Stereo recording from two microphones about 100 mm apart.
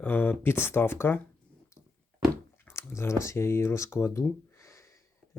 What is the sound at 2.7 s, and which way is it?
Speech, 25° left (ahead or behind).